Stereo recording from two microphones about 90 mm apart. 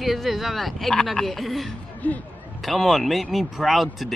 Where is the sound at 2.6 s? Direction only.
Centre (ahead or behind).